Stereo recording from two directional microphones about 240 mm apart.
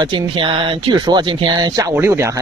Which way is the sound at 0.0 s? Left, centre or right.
Right.